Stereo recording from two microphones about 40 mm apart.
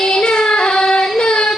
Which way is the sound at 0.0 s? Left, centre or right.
Centre.